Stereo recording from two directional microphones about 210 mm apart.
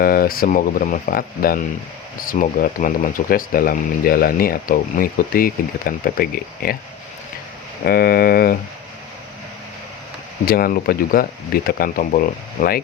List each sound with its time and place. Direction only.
0.0 s speech: 45° left (ahead or behind)
7.9 s speech: 45° left (ahead or behind)
10.4 s speech: 45° left (ahead or behind)